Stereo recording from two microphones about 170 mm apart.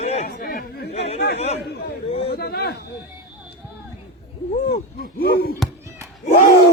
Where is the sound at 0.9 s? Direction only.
40° left (ahead or behind).